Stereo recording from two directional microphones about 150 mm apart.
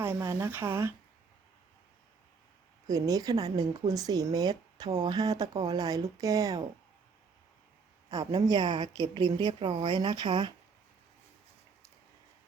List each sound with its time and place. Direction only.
0.0 s speech: 20° right (ahead or behind)
2.8 s speech: 25° right (ahead or behind)
8.1 s speech: 25° right (ahead or behind)